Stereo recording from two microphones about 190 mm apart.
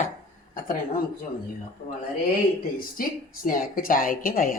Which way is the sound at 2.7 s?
45° left (ahead or behind).